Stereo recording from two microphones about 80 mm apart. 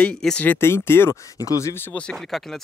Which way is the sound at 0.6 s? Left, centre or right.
Left.